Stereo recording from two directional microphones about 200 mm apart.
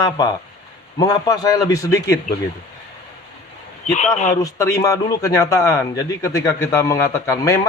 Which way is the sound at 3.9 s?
35° left (ahead or behind).